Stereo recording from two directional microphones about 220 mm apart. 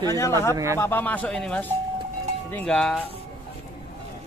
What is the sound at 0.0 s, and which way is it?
Speech, 10° left (ahead or behind).